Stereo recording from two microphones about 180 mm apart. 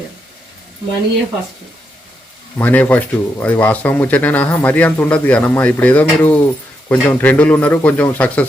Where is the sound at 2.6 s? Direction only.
10° left (ahead or behind).